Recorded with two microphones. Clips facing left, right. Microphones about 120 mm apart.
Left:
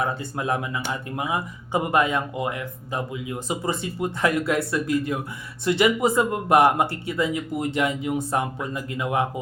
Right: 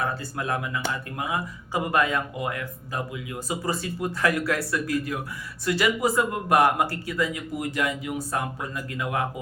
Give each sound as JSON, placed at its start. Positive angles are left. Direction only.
{"t": 0.0, "sound": "speech", "side_deg": 20}